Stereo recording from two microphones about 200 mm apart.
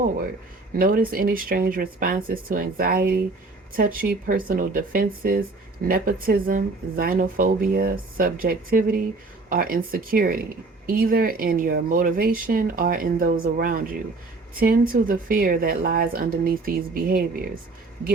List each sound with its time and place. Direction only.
0.7 s speech: 45° right (ahead or behind)